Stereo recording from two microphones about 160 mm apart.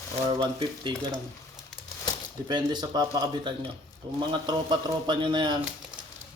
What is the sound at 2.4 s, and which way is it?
A man's voice, 30° right (ahead or behind).